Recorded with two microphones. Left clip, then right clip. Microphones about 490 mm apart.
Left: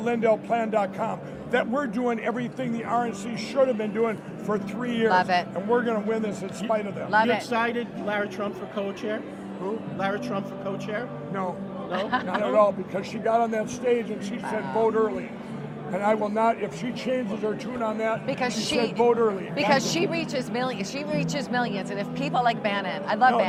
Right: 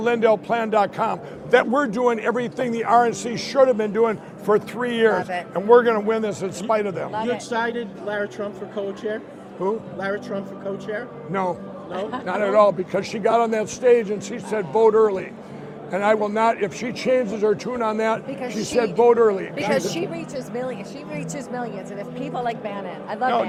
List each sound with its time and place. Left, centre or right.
0.0 s a man's voice: right
7.5 s speech: centre
12.4 s a man's voice: right
18.3 s speech: left
19.0 s a man's voice: right
19.5 s speech: centre